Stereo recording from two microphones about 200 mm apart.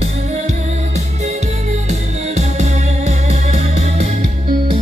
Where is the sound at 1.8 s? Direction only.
35° right (ahead or behind).